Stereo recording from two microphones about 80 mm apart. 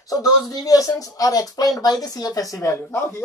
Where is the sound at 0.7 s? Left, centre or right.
Left.